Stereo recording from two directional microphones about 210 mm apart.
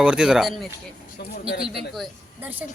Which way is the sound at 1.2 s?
50° left (ahead or behind).